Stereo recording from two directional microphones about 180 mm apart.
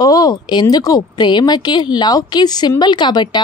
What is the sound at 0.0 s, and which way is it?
A woman's voice, 20° left (ahead or behind).